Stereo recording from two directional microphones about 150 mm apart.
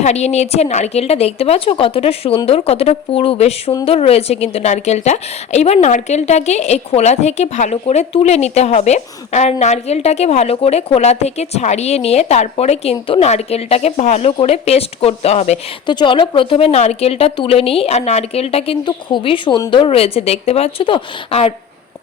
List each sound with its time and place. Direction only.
0.0 s speech: 45° left (ahead or behind)
15.9 s speech: 30° left (ahead or behind)